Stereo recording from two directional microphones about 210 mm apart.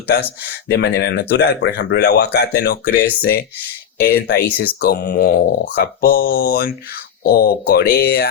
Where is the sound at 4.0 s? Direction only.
50° left (ahead or behind).